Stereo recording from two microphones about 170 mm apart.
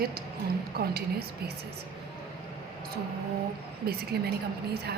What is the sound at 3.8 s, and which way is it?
Speech, 65° right (ahead or behind).